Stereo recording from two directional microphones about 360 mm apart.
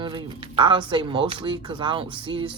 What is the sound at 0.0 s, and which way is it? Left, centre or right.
Speech, centre.